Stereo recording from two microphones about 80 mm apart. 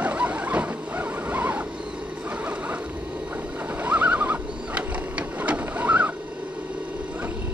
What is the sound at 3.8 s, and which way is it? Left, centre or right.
Printer, centre.